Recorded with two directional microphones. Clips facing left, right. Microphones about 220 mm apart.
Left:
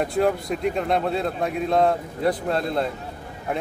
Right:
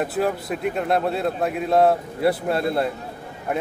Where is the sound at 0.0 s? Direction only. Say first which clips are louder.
Left 1 dB; 5° right (ahead or behind).